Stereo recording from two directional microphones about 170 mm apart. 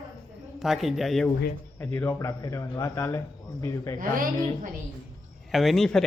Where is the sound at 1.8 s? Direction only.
10° left (ahead or behind).